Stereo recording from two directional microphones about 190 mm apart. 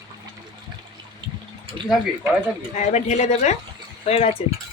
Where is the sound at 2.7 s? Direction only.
35° left (ahead or behind).